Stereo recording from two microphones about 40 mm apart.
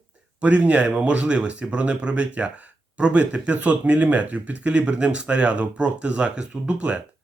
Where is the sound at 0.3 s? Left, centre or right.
Right.